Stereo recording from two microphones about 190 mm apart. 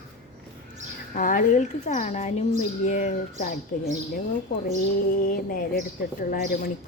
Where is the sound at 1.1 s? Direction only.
45° left (ahead or behind).